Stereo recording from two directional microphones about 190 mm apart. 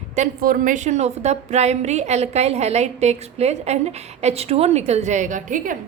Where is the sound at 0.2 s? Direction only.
45° right (ahead or behind).